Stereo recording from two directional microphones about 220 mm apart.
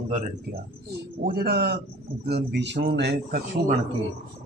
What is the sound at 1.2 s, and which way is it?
Speech, 45° right (ahead or behind).